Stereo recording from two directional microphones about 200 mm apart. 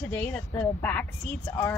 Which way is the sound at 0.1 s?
10° left (ahead or behind).